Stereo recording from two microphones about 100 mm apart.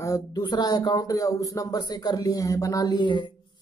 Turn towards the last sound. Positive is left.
turn(degrees=50)  # may be behind; listen again after turning